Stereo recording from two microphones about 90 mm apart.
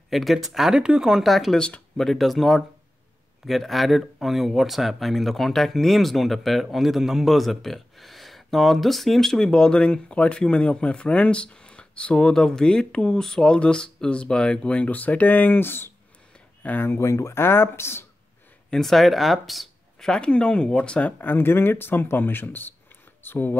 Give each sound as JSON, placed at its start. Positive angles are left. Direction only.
{"t": 0.1, "sound": "speech", "side_deg": 0}
{"t": 18.7, "sound": "speech", "side_deg": 5}
{"t": 21.2, "sound": "speech", "side_deg": 25}